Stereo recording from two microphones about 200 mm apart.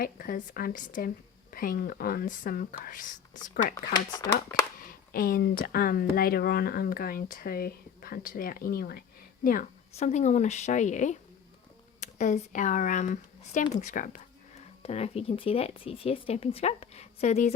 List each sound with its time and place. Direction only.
0.0 s speech: 45° left (ahead or behind)
3.9 s speech: 20° left (ahead or behind)
4.9 s speech: 45° left (ahead or behind)